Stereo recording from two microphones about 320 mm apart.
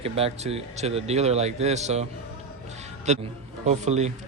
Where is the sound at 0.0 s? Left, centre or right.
Centre.